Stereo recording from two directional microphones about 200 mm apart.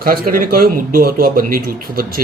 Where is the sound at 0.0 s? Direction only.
45° right (ahead or behind).